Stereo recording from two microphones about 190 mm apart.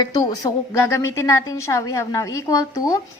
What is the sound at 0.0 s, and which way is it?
A woman's voice, 20° left (ahead or behind).